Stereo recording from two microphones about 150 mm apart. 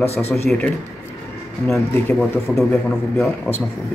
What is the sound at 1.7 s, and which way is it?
Speech, 15° left (ahead or behind).